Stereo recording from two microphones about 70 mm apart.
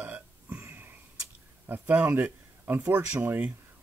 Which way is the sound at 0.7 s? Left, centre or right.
Right.